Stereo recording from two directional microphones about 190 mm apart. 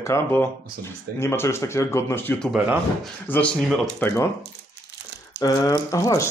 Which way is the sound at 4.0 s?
10° left (ahead or behind).